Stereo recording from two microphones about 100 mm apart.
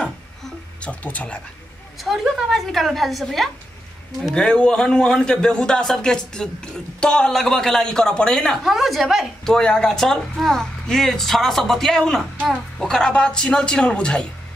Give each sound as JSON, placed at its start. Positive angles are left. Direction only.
{"t": 0.7, "sound": "speech", "side_deg": 15}
{"t": 2.0, "sound": "a man's voice", "side_deg": 0}